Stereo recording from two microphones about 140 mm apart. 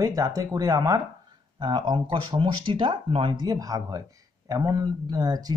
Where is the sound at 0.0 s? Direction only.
25° right (ahead or behind).